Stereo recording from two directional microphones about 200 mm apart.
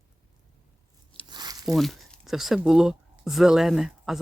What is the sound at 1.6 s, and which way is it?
Speech, centre (ahead or behind).